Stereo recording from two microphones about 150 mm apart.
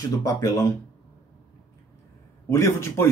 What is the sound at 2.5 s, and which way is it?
Speech, 20° left (ahead or behind).